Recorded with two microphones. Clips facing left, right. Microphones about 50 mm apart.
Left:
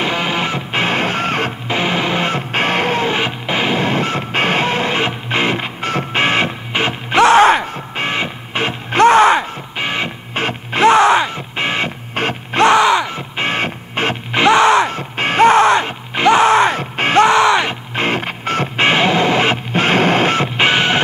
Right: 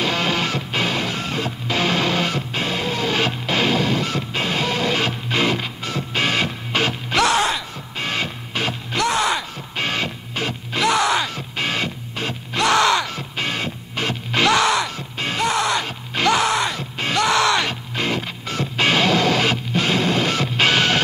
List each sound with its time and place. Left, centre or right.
0.0 s music: centre
0.8 s music: left
1.7 s music: left
3.2 s music: left
9.8 s music: left
10.3 s music: left
12.2 s music: left
12.6 s a sound: left
13.4 s music: left